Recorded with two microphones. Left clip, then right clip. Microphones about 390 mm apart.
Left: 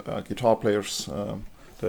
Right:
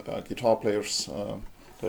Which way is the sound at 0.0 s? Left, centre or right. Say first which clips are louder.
Left 2 dB; left.